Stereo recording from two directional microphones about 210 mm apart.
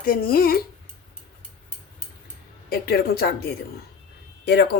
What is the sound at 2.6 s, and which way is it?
Speech, 45° left (ahead or behind).